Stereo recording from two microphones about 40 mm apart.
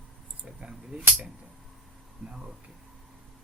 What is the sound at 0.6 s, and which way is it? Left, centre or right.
Speech, right.